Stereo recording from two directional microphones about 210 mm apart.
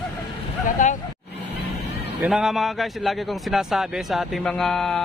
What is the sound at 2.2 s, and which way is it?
A man's voice, centre (ahead or behind).